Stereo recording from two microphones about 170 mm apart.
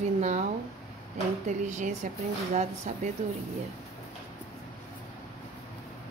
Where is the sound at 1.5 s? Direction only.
45° right (ahead or behind).